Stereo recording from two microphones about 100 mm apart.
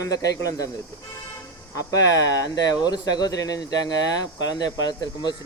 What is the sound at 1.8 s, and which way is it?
Speech, 35° left (ahead or behind).